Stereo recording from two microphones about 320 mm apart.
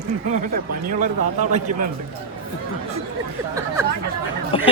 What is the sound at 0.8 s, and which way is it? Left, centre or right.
Speech, right.